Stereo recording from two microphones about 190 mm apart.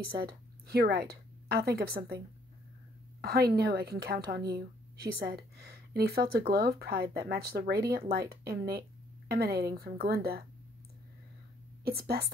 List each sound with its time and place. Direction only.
0.7 s a woman's voice: 55° right (ahead or behind)
3.2 s a woman's voice: 55° right (ahead or behind)
11.8 s a woman's voice: 55° right (ahead or behind)